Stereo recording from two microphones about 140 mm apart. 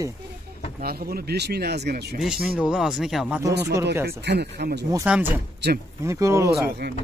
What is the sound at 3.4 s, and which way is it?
Speech, 20° right (ahead or behind).